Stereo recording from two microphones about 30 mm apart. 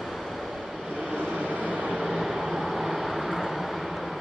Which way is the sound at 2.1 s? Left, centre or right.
Centre.